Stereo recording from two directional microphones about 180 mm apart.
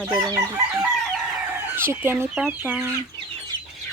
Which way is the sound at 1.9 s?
15° right (ahead or behind).